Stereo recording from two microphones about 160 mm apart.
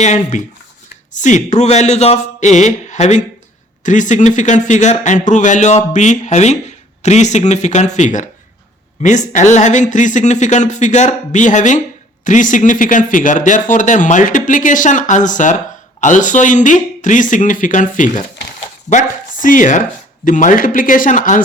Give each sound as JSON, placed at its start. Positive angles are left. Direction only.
{"t": 0.0, "sound": "a man's voice", "side_deg": 50}